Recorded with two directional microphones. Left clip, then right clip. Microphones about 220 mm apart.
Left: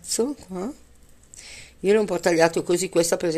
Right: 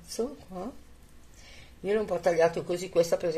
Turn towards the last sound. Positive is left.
turn(degrees=40)  # may be behind; listen again after turning